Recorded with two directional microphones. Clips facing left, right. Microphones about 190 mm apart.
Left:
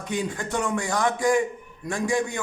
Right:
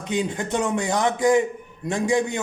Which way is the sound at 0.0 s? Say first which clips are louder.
Right 3 dB; 20° right (ahead or behind).